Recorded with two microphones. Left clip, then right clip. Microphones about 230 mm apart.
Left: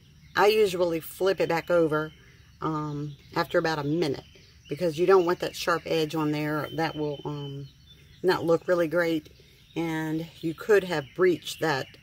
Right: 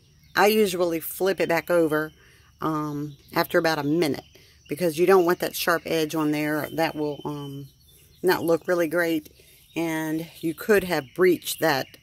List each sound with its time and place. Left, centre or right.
0.3 s speech: right